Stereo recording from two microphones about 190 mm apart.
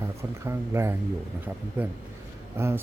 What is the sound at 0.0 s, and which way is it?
Speech, 15° right (ahead or behind).